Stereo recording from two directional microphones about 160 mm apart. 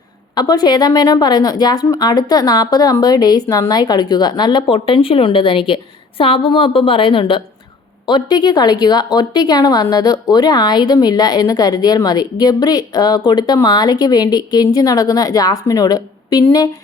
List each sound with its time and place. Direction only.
0.3 s a woman's voice: 25° left (ahead or behind)